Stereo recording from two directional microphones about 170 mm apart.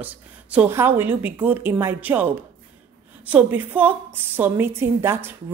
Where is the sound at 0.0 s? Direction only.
10° right (ahead or behind).